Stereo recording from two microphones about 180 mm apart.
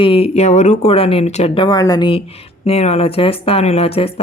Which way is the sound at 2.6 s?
35° left (ahead or behind).